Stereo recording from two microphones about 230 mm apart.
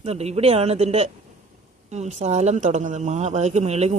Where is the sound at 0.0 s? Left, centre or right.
Right.